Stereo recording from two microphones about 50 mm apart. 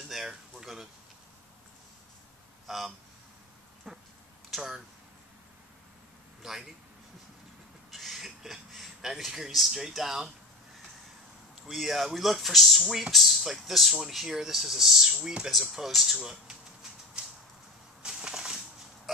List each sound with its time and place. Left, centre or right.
0.1 s speech: centre
2.6 s speech: centre
3.9 s a sound: centre
4.5 s speech: centre
6.4 s speech: centre
7.9 s a sound: centre
11.7 s speech: centre
16.2 s speech: centre
17.2 s a sound: right
19.1 s pig: centre